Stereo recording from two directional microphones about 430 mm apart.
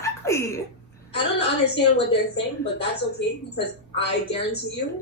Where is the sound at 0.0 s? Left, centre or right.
Centre.